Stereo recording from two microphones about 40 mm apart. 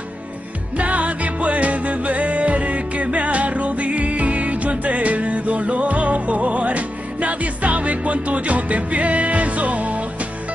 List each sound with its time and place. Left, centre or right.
0.7 s music: right